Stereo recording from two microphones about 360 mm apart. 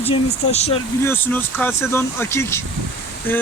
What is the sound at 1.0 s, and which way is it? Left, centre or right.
Speech, centre.